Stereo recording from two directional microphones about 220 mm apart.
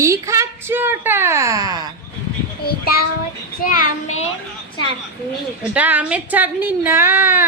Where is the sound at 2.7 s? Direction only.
45° left (ahead or behind).